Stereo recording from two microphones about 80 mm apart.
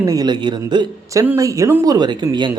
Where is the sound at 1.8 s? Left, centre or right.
Right.